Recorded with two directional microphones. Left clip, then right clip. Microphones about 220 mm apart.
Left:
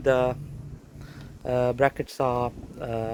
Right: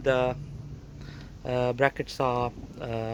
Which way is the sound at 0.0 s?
15° left (ahead or behind).